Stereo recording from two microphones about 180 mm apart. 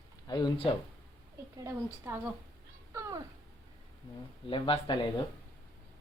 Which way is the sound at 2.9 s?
15° right (ahead or behind).